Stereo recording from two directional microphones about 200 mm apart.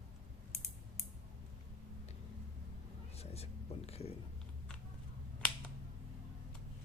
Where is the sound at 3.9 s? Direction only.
30° left (ahead or behind).